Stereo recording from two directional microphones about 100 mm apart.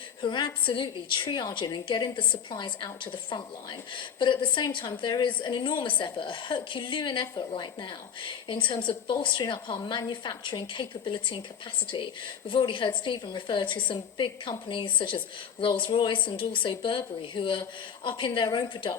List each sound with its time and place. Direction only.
0.2 s a woman's voice: 55° left (ahead or behind)
12.5 s a woman's voice: 55° left (ahead or behind)